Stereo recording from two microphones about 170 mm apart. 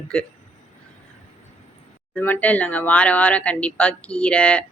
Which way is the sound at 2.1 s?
10° left (ahead or behind).